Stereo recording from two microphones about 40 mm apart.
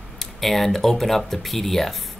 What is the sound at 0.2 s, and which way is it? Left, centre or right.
Speech, centre.